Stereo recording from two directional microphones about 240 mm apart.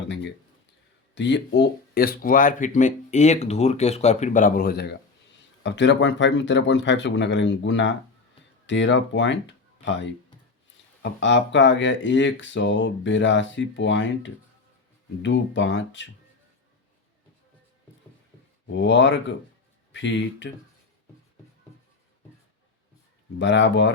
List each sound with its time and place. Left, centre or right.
1.1 s speech: left
11.0 s speech: left
18.7 s speech: left
23.4 s speech: left